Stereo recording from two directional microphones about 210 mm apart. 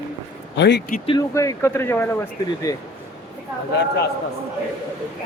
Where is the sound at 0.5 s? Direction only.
55° left (ahead or behind).